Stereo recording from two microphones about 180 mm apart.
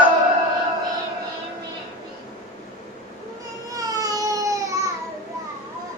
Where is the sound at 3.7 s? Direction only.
20° right (ahead or behind).